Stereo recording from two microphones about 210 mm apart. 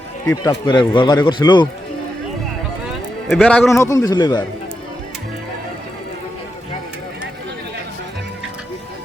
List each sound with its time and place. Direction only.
0.3 s a man's voice: 20° left (ahead or behind)
3.2 s a man's voice: 5° left (ahead or behind); by 4.4 s 20° left (ahead or behind)